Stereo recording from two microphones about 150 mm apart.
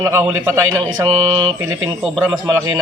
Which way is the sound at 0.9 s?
30° right (ahead or behind).